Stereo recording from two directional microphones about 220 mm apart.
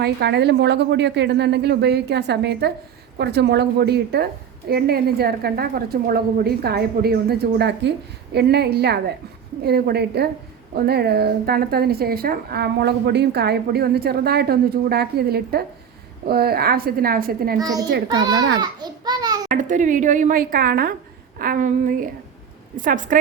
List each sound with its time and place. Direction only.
0.0 s a woman's voice: 50° right (ahead or behind)
17.6 s a child's voice: 15° right (ahead or behind)
19.5 s a woman's voice: 35° right (ahead or behind)